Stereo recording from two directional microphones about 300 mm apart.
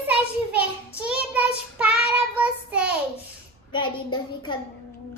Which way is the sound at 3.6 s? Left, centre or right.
Centre.